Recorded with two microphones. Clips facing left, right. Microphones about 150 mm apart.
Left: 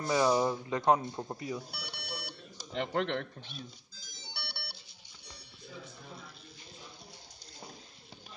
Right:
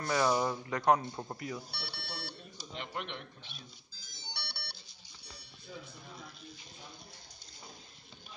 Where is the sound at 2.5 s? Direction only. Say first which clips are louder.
Left 10 dB; 85° left.